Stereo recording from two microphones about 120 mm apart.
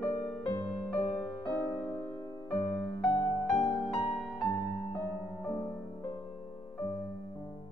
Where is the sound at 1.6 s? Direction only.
35° left (ahead or behind); by 3.3 s 20° left (ahead or behind).